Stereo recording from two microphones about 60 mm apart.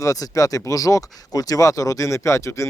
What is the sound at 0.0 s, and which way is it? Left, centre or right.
Speech, left.